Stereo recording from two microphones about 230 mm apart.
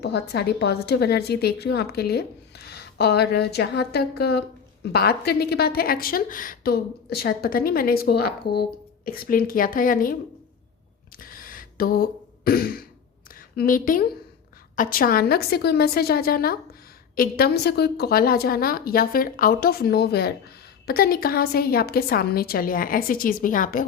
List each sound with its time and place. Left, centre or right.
0.0 s a woman's voice: left
11.2 s a sound: left
13.6 s a woman's voice: left